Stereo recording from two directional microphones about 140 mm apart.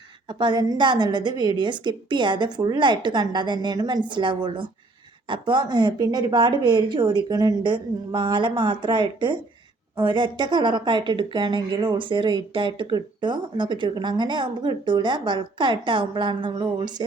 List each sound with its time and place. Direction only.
0.3 s a woman's voice: 35° right (ahead or behind)